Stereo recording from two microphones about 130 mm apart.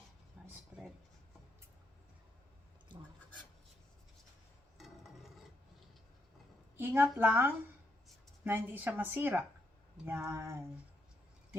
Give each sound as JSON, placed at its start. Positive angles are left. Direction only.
{"t": 0.4, "sound": "a sound", "side_deg": 0}
{"t": 0.7, "sound": "writing", "side_deg": -5}
{"t": 6.7, "sound": "speech", "side_deg": -15}